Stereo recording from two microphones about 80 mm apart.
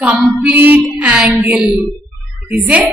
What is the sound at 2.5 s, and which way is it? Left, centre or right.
Female singing, centre.